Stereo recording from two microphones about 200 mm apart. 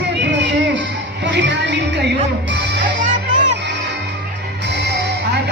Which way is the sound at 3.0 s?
40° right (ahead or behind).